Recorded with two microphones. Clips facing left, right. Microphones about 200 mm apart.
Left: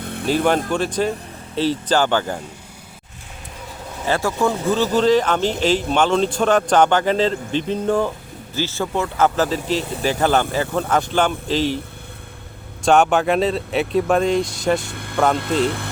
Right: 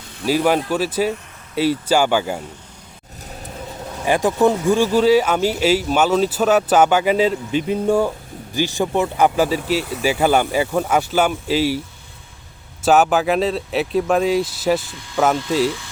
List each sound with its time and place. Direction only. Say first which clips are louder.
0.0 s music: left 7 dB; 60° left (ahead or behind)
0.3 s speech: right 1 dB; 5° right (ahead or behind)
4.0 s speech: right 4 dB; 15° right (ahead or behind)
12.8 s speech: even; 5° right (ahead or behind)
14.8 s speech: even; 60° left (ahead or behind)